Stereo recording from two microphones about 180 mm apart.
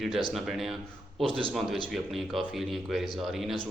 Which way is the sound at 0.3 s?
Centre (ahead or behind).